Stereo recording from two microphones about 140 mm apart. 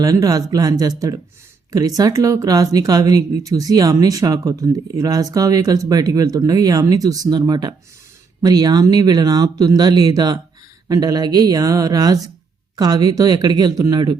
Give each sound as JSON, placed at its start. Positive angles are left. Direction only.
{"t": 0.0, "sound": "speech", "side_deg": -25}